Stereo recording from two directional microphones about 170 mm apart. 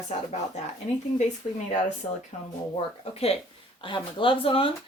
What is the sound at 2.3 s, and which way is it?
Speech, 40° left (ahead or behind).